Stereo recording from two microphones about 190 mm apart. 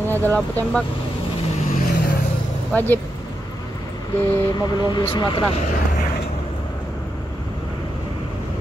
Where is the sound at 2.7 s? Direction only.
10° left (ahead or behind).